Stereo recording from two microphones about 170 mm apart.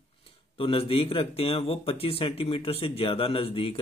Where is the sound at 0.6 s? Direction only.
30° left (ahead or behind).